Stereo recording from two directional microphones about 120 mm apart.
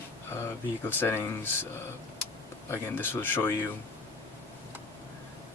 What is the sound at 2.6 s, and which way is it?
Speech, 20° left (ahead or behind).